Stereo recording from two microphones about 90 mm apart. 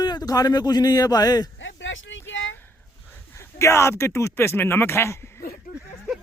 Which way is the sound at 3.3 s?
30° left (ahead or behind).